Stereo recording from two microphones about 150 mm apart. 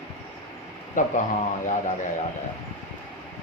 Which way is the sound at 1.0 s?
60° left (ahead or behind).